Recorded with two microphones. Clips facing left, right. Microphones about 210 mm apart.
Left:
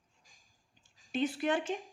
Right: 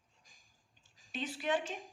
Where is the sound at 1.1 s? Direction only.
55° left (ahead or behind).